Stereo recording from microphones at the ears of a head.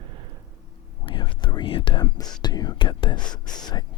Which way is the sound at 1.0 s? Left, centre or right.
Left.